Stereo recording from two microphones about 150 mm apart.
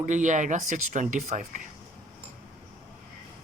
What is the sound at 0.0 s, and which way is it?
Speech, 55° right (ahead or behind).